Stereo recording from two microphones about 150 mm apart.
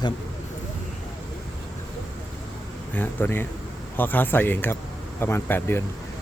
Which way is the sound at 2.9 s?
10° left (ahead or behind).